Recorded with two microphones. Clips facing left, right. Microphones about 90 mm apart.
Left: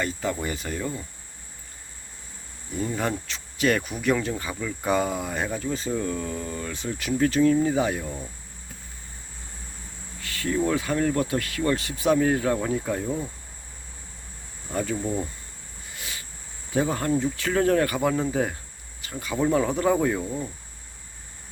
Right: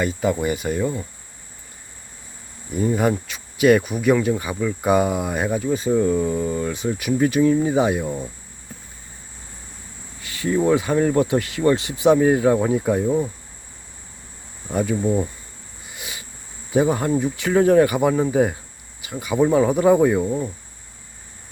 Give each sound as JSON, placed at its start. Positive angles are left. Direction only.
{"t": 0.0, "sound": "speech", "side_deg": -10}
{"t": 2.7, "sound": "speech", "side_deg": -15}
{"t": 10.2, "sound": "speech", "side_deg": -20}
{"t": 14.7, "sound": "speech", "side_deg": -15}
{"t": 15.9, "sound": "a sound", "side_deg": -15}
{"t": 16.7, "sound": "speech", "side_deg": -15}
{"t": 20.2, "sound": "speech", "side_deg": -30}